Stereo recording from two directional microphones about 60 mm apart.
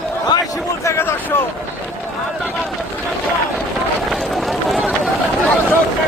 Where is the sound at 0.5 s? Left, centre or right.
Left.